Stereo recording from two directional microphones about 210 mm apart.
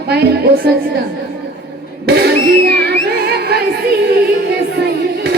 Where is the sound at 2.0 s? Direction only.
50° right (ahead or behind).